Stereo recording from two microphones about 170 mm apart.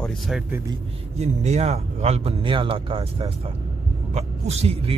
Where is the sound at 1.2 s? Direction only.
40° right (ahead or behind).